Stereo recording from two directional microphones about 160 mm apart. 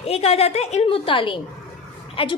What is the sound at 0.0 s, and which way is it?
A woman's voice, 40° left (ahead or behind).